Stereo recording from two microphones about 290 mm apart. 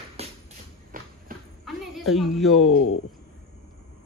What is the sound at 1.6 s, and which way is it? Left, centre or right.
A man's voice, centre.